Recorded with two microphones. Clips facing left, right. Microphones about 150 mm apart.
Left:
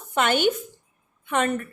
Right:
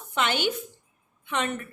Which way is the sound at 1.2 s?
50° left (ahead or behind).